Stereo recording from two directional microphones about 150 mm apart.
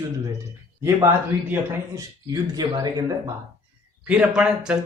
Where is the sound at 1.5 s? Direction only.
15° right (ahead or behind).